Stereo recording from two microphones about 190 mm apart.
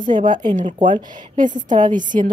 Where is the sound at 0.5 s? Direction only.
40° right (ahead or behind).